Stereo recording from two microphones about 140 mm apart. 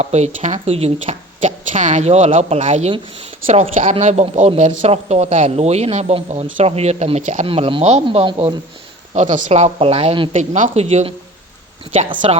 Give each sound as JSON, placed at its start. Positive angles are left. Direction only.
{"t": 0.0, "sound": "a man's voice", "side_deg": -50}
{"t": 3.4, "sound": "a man's voice", "side_deg": -45}
{"t": 7.4, "sound": "speech", "side_deg": -40}
{"t": 9.1, "sound": "a man's voice", "side_deg": -60}
{"t": 10.3, "sound": "speech", "side_deg": -60}
{"t": 12.2, "sound": "a man's voice", "side_deg": -45}